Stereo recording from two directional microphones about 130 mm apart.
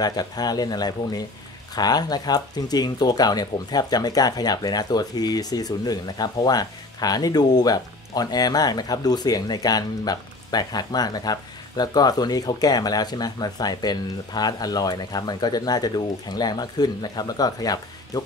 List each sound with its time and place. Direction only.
0.0 s speech: 30° left (ahead or behind)